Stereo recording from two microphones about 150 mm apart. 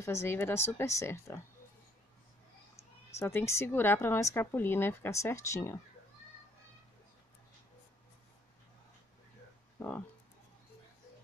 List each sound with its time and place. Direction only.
0.0 s a woman's voice: 15° left (ahead or behind)
2.7 s a woman's voice: 20° left (ahead or behind)
9.8 s speech: 10° left (ahead or behind)